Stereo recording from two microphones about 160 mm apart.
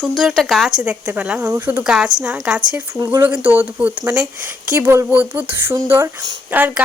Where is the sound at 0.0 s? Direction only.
5° right (ahead or behind).